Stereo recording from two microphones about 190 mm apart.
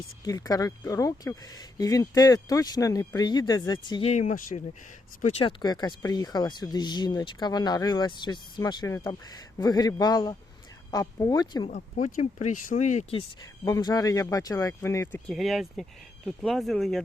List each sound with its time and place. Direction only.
0.3 s speech: 20° left (ahead or behind)
4.1 s speech: 40° left (ahead or behind)
5.2 s speech: 30° left (ahead or behind)
11.7 s speech: 40° left (ahead or behind)
13.4 s speech: 15° left (ahead or behind)
15.3 s speech: centre (ahead or behind)